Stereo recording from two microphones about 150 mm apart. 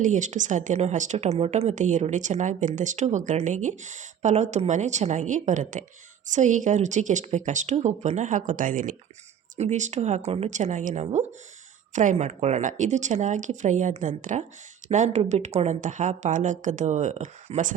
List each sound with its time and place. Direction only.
0.0 s a woman's voice: 55° right (ahead or behind)
9.6 s a woman's voice: 50° right (ahead or behind)